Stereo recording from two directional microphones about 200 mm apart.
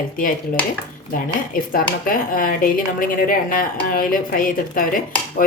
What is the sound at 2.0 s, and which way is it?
A woman's voice, 45° left (ahead or behind).